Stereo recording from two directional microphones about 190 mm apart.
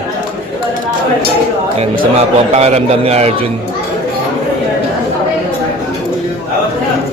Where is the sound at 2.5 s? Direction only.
35° right (ahead or behind).